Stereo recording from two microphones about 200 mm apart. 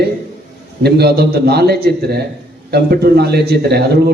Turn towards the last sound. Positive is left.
turn(degrees=-50)  # may be behind; listen again after turning